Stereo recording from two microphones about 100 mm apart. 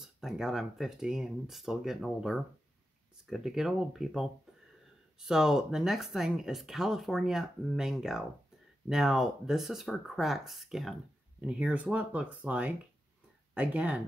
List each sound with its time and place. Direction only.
0.0 s speech: 5° right (ahead or behind)
11.4 s speech: 10° right (ahead or behind)